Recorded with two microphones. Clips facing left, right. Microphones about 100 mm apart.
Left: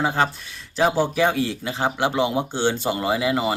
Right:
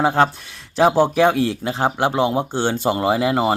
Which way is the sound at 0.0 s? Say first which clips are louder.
Right 5 dB; 55° right (ahead or behind).